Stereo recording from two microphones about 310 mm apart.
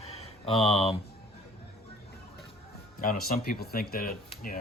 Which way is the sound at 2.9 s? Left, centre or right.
Left.